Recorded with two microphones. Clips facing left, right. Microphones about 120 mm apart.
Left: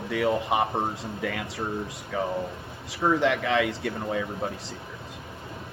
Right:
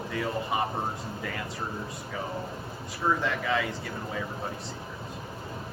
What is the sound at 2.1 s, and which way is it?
Speech, 75° left (ahead or behind).